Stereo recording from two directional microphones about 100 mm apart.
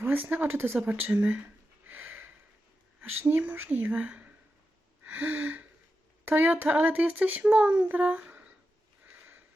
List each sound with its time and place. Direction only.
0.0 s speech: 20° right (ahead or behind)
1.9 s a sound: 20° right (ahead or behind)
3.0 s speech: 20° right (ahead or behind)
5.0 s gasp: 15° right (ahead or behind)
6.2 s speech: 20° right (ahead or behind)